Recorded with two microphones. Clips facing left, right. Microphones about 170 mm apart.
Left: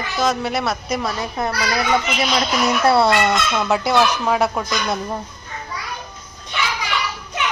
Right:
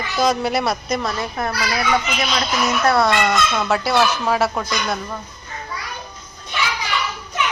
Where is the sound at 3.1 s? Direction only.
Centre (ahead or behind).